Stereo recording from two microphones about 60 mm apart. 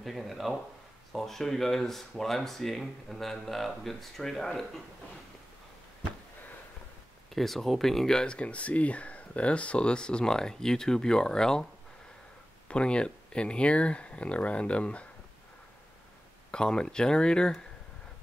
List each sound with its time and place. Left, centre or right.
0.0 s speech: centre
7.3 s speech: centre
12.6 s speech: centre
16.5 s speech: centre